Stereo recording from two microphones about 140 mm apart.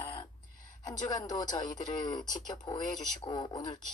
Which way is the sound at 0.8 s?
25° left (ahead or behind).